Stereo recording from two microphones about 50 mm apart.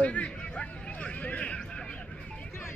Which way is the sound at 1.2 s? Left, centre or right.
Left.